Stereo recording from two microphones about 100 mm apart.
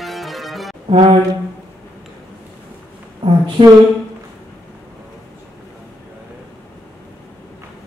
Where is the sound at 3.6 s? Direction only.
80° right.